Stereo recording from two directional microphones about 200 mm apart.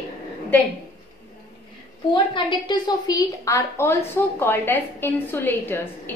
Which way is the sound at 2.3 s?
20° left (ahead or behind).